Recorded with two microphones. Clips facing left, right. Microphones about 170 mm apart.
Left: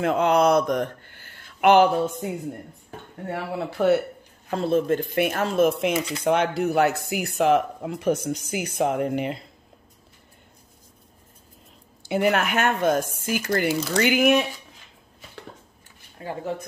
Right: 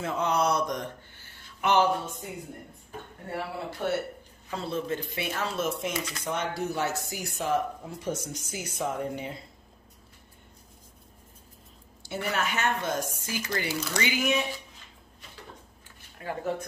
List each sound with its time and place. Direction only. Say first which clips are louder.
0.0 s speech: left 8 dB; 65° left (ahead or behind)
1.6 s a sound: left 8 dB; 60° left (ahead or behind)
3.3 s speech: left 5 dB; 70° left (ahead or behind)
4.5 s speech: left 10 dB; 50° left (ahead or behind); by 9.4 s 75° left (ahead or behind)
12.1 s speech: left 9 dB; 65° left (ahead or behind)
16.2 s speech: left 2 dB; 30° left (ahead or behind)